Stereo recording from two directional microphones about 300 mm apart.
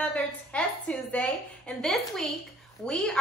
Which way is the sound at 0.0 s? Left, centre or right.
Centre.